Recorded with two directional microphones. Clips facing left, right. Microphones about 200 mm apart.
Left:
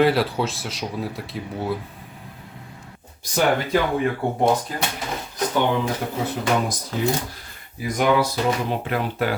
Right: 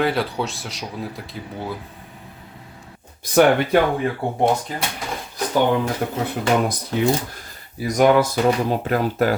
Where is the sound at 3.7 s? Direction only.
60° right (ahead or behind).